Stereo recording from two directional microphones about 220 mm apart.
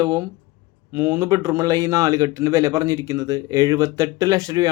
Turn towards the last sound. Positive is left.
turn(degrees=-15)  # may be behind; listen again after turning